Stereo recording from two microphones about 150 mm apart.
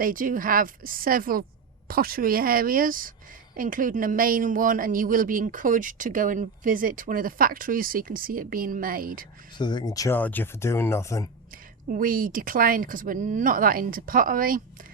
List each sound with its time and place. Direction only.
0.0 s speech: 65° right (ahead or behind)
9.6 s speech: 30° left (ahead or behind)
10.2 s speech: 10° left (ahead or behind)
11.9 s speech: 70° right (ahead or behind)